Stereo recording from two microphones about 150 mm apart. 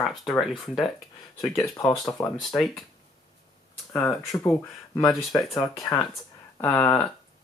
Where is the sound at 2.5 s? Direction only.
Centre (ahead or behind).